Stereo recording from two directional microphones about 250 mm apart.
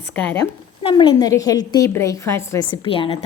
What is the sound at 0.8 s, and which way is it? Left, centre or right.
A woman's voice, centre.